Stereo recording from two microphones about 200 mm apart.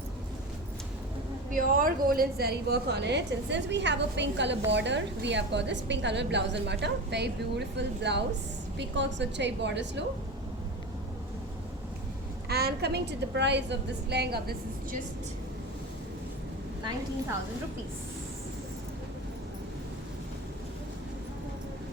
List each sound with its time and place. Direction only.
1.5 s a woman's voice: 45° right (ahead or behind); by 10.1 s 60° right (ahead or behind)
12.5 s a woman's voice: 50° right (ahead or behind)